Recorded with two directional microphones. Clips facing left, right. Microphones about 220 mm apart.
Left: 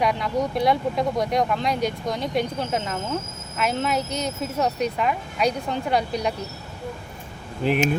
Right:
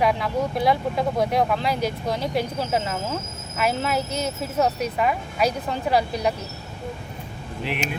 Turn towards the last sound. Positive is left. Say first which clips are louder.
# left 7 dB
turn(degrees=40)  # may be behind; listen again after turning